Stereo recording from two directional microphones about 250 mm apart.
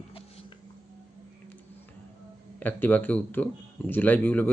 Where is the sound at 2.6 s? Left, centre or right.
Centre.